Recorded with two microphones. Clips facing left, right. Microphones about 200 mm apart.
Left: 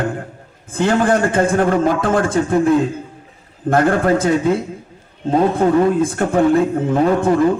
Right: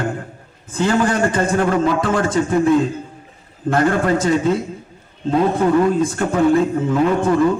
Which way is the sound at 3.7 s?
50° left (ahead or behind).